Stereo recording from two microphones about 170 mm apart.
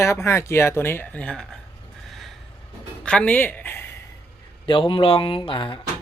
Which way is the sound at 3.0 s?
10° left (ahead or behind).